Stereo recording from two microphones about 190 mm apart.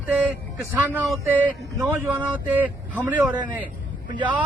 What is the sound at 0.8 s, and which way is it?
Speech, 10° right (ahead or behind).